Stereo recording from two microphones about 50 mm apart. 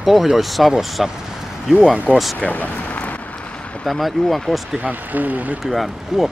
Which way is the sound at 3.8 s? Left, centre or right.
Centre.